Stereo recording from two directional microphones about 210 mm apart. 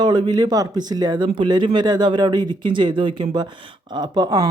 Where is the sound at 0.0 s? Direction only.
20° right (ahead or behind).